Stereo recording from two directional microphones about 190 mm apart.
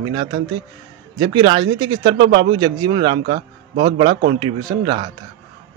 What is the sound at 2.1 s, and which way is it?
Speech, 70° right (ahead or behind).